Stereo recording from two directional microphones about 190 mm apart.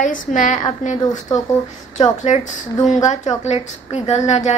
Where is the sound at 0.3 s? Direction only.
40° left (ahead or behind).